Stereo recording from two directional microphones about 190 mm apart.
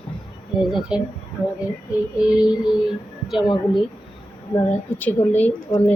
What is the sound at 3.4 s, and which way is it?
Speech, 25° left (ahead or behind).